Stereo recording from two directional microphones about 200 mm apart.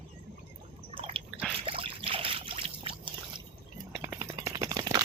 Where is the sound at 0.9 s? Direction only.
25° right (ahead or behind).